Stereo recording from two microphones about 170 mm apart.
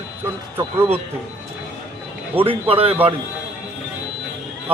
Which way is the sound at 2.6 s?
35° right (ahead or behind).